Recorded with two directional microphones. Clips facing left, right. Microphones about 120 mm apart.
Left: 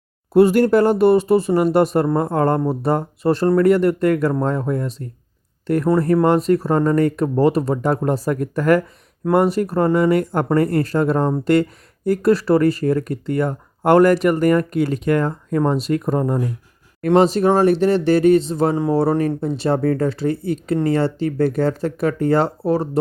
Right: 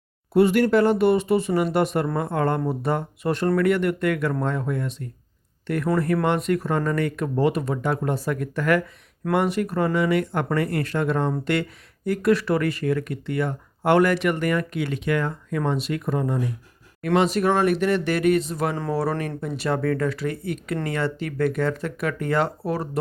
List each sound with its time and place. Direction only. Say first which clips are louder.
0.3 s speech: left 5 dB; 40° left (ahead or behind)
17.2 s speech: left 6 dB; 30° left (ahead or behind)